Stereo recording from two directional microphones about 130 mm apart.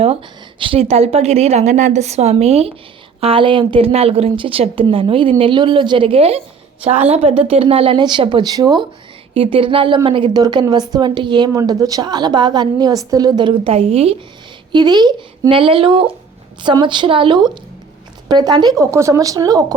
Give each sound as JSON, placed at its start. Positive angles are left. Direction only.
{"t": 0.6, "sound": "a woman's voice", "side_deg": -45}
{"t": 9.3, "sound": "a woman's voice", "side_deg": -45}
{"t": 14.7, "sound": "a woman's voice", "side_deg": -35}